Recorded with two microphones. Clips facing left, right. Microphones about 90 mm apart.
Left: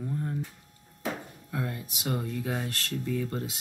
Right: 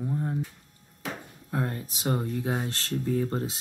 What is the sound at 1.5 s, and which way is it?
Speech, 35° right (ahead or behind).